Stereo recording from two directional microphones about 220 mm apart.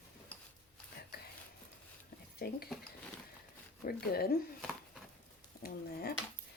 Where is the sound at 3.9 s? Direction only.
45° left (ahead or behind).